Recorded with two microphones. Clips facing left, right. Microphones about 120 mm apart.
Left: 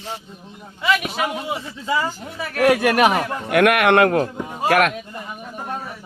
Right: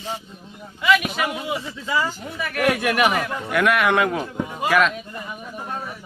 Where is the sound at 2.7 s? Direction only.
55° left (ahead or behind).